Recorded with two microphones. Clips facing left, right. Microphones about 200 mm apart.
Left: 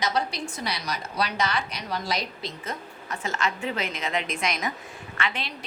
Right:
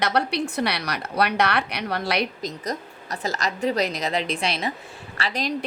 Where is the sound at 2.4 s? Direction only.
40° right (ahead or behind).